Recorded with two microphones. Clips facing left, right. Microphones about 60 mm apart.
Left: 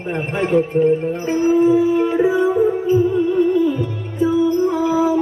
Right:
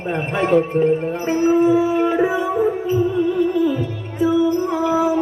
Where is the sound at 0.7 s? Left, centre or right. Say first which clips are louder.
Left 1 dB; right.